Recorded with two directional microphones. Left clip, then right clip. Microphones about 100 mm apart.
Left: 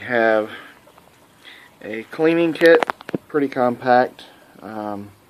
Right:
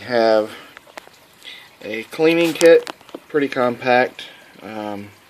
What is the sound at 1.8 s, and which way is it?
Speech, 10° right (ahead or behind).